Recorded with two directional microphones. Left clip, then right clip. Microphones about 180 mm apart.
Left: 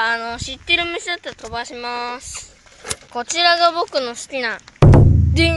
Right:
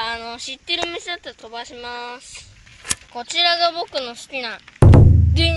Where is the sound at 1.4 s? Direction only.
10° left (ahead or behind).